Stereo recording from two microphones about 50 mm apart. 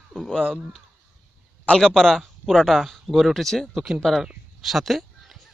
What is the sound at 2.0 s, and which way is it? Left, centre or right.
Speech, centre.